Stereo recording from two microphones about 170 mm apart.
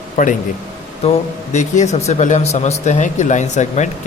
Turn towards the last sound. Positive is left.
turn(degrees=45)  # may be behind; listen again after turning